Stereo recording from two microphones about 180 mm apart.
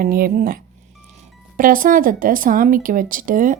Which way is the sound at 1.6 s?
50° right (ahead or behind).